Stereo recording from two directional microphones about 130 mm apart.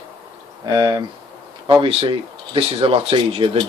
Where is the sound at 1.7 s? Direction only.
45° right (ahead or behind).